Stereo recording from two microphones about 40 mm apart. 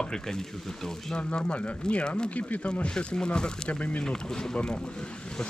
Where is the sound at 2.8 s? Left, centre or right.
Left.